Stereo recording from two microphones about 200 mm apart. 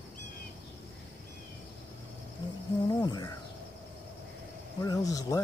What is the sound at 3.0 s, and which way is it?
Cricket, 20° left (ahead or behind).